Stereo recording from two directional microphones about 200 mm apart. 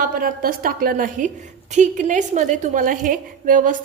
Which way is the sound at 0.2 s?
45° right (ahead or behind).